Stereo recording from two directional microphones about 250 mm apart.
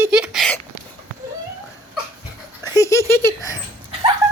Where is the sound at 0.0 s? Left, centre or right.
Centre.